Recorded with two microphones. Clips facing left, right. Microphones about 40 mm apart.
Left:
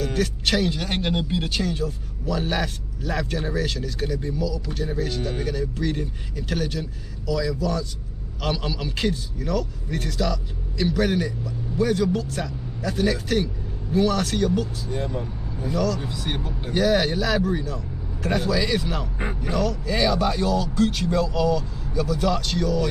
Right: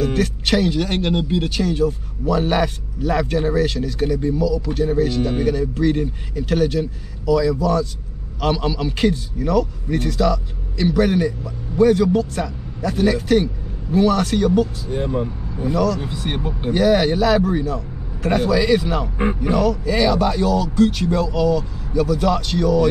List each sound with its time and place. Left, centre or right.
0.0 s a man's voice: centre
14.9 s speech: right
15.7 s a man's voice: centre
16.0 s speech: right
16.7 s a man's voice: centre